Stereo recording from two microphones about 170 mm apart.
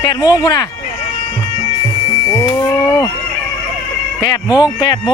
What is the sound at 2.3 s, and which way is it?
Livestock, 25° left (ahead or behind).